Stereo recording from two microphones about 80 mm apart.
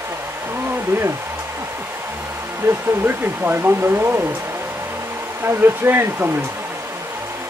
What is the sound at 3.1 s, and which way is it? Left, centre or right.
Speech, right.